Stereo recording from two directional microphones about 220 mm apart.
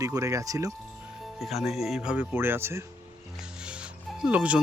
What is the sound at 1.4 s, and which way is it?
Speech, centre (ahead or behind).